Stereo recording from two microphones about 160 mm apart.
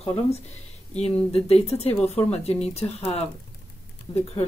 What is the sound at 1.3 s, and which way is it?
A woman's voice, 40° left (ahead or behind).